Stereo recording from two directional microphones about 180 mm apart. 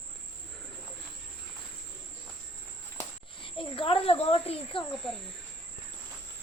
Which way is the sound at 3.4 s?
30° left (ahead or behind).